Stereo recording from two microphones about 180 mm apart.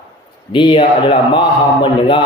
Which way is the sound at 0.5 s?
25° left (ahead or behind).